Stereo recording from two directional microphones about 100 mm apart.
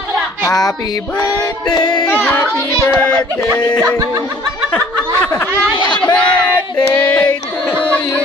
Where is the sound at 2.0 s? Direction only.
15° left (ahead or behind).